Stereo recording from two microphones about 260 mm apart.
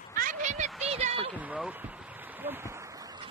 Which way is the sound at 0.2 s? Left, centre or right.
Right.